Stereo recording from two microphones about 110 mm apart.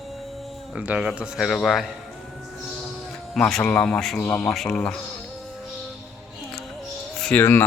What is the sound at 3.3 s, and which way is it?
Speech, 5° left (ahead or behind).